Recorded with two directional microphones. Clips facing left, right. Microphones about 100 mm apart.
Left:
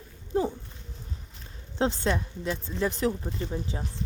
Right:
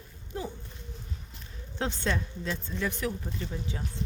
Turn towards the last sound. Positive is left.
turn(degrees=30)  # may be behind; listen again after turning